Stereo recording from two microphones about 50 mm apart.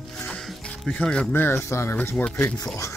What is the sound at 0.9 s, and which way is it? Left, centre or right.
Speech, left.